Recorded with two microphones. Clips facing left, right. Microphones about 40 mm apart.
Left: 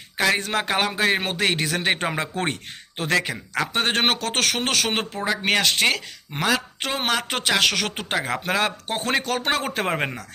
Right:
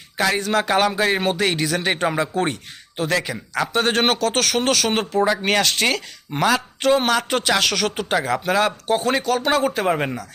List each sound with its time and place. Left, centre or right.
0.3 s a man's voice: left
0.7 s speech: centre
1.2 s a man's voice: left
5.3 s a man's voice: centre